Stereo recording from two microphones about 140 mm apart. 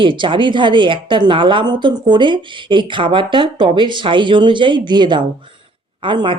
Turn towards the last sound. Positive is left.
turn(degrees=-35)  # may be behind; listen again after turning